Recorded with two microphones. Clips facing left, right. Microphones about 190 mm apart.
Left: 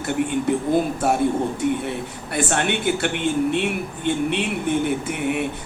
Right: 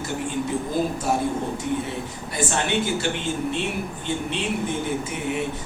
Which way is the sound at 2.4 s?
60° left (ahead or behind).